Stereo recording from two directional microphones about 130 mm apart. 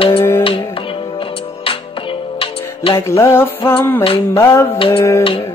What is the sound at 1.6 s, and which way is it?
Music, 45° left (ahead or behind).